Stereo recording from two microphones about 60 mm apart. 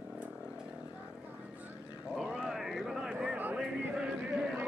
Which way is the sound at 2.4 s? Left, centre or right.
Centre.